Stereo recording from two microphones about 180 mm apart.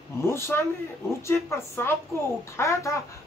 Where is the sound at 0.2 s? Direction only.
15° left (ahead or behind).